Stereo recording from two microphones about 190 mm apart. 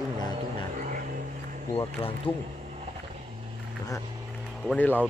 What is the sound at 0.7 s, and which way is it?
Vehicle, 45° right (ahead or behind).